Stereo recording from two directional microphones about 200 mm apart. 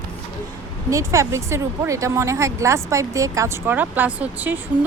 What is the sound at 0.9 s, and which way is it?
Speech, 15° right (ahead or behind).